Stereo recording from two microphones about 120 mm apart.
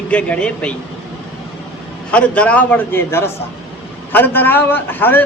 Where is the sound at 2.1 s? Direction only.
10° left (ahead or behind).